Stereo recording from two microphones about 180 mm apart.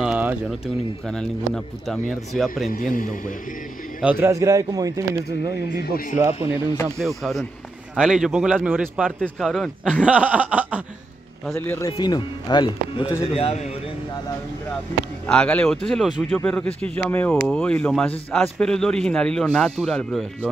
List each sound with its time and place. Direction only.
0.0 s a sound: 10° right (ahead or behind)
1.0 s speech: 5° left (ahead or behind)
2.9 s speech: 50° left (ahead or behind)
4.0 s speech: 10° right (ahead or behind)
5.8 s speech: 55° left (ahead or behind)
6.1 s speech: 15° right (ahead or behind)
7.0 s speech: centre (ahead or behind)
11.5 s speech: 10° left (ahead or behind)
12.0 s speech: 25° left (ahead or behind)
15.2 s speech: 5° left (ahead or behind)